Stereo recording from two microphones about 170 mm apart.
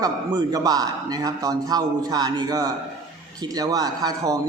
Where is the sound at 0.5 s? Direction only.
20° right (ahead or behind).